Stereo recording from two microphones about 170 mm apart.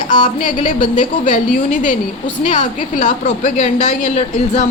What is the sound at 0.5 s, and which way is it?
A woman's voice, 45° left (ahead or behind).